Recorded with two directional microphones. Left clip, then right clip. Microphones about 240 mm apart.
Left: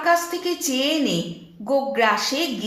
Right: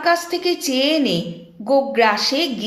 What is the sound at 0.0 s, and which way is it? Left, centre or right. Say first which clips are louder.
Speech: right 2 dB; right.